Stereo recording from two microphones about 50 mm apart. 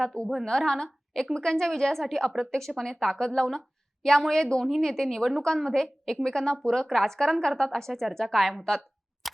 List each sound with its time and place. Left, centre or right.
0.0 s a woman's voice: centre
9.2 s scissors: centre